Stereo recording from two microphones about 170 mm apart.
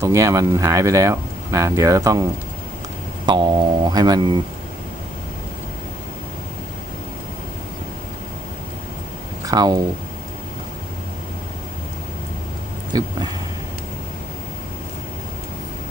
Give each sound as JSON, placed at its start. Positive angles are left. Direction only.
{"t": 0.0, "sound": "speech", "side_deg": -20}
{"t": 3.2, "sound": "speech", "side_deg": -25}
{"t": 9.5, "sound": "speech", "side_deg": -25}
{"t": 12.9, "sound": "speech", "side_deg": -25}